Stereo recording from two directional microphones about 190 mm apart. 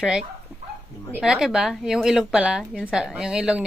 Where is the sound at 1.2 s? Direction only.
5° right (ahead or behind).